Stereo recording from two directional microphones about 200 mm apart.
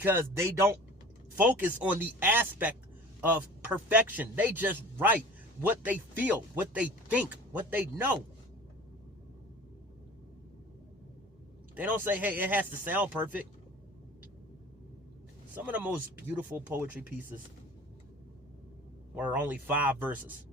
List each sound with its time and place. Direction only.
0.0 s speech: 10° right (ahead or behind)
11.8 s speech: 10° right (ahead or behind)
15.5 s speech: 10° right (ahead or behind)
19.1 s speech: 5° right (ahead or behind)